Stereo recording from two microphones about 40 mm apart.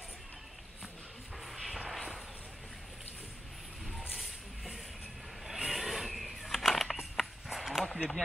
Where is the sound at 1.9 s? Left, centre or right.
Centre.